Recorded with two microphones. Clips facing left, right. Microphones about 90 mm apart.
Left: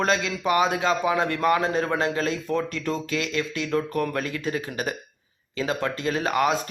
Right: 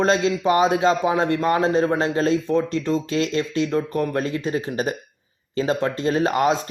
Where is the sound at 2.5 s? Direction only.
25° right (ahead or behind).